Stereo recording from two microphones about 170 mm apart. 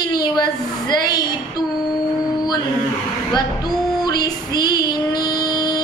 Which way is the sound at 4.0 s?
25° left (ahead or behind).